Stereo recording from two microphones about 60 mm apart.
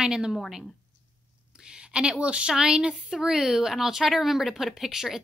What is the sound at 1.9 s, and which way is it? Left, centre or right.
A woman's voice, centre.